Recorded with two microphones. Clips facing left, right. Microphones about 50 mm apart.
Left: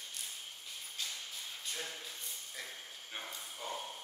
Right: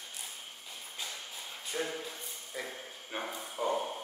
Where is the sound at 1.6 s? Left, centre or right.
Right.